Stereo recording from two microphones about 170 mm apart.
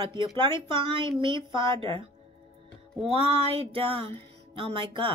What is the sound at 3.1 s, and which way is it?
Speech, 35° right (ahead or behind).